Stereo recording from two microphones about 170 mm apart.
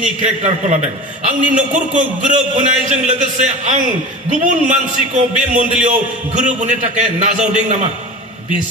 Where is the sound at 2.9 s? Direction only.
45° right (ahead or behind).